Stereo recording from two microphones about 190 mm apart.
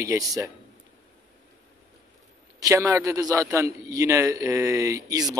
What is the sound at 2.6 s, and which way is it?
A man's voice, 20° right (ahead or behind).